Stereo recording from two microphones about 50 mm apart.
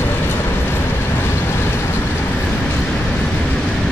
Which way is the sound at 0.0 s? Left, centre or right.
Left.